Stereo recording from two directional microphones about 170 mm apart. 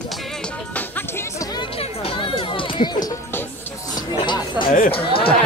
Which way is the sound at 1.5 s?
35° left (ahead or behind).